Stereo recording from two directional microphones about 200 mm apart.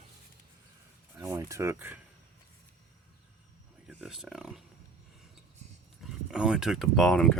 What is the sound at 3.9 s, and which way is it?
Speech, centre (ahead or behind).